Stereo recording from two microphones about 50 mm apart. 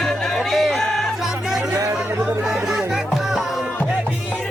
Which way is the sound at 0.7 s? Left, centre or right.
Centre.